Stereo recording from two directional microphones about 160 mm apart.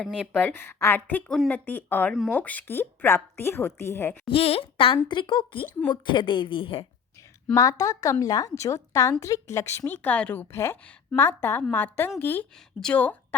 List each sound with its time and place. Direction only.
0.0 s a woman's voice: 5° left (ahead or behind)
4.3 s a woman's voice: 35° left (ahead or behind)
7.5 s a woman's voice: 20° left (ahead or behind)